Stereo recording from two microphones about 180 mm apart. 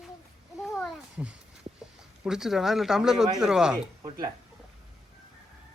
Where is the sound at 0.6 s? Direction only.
5° right (ahead or behind).